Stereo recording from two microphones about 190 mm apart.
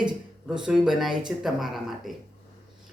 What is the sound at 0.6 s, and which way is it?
Speech, centre (ahead or behind).